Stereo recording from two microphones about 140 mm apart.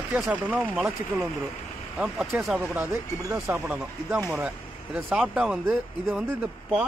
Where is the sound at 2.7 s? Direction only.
15° right (ahead or behind).